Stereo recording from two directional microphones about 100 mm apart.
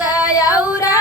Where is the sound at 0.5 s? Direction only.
15° right (ahead or behind).